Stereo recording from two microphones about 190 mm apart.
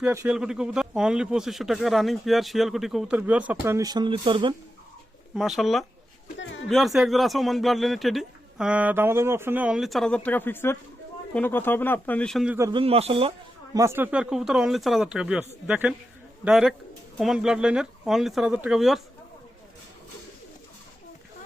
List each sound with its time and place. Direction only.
0.0 s speech: 10° right (ahead or behind); by 4.5 s 25° right (ahead or behind)
5.4 s speech: centre (ahead or behind)
12.5 s speech: 15° right (ahead or behind)
12.8 s speech: 30° right (ahead or behind)
13.7 s speech: 15° right (ahead or behind)